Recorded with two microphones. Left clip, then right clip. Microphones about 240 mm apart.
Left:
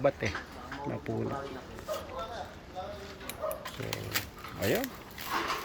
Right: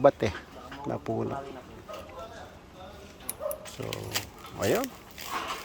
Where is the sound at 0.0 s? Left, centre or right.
Right.